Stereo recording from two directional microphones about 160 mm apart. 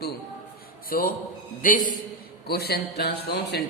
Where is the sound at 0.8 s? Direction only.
65° left (ahead or behind).